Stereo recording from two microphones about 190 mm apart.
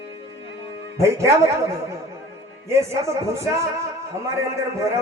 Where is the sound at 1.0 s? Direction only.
15° right (ahead or behind).